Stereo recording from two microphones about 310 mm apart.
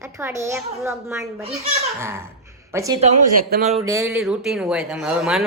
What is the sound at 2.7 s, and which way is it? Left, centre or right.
Speech, centre.